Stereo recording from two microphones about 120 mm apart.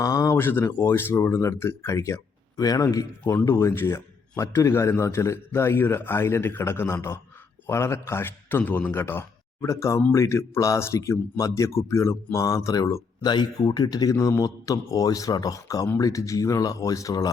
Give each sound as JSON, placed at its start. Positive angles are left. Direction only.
{"t": 0.0, "sound": "speech", "side_deg": 30}